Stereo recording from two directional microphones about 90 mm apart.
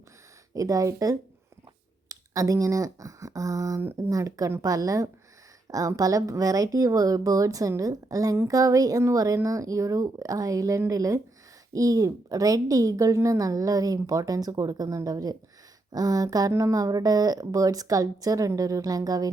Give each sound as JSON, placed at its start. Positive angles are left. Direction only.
{"t": 0.5, "sound": "speech", "side_deg": -40}